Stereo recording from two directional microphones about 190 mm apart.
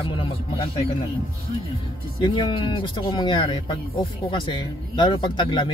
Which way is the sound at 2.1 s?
25° left (ahead or behind).